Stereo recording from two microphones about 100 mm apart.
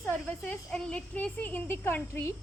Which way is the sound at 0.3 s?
10° left (ahead or behind).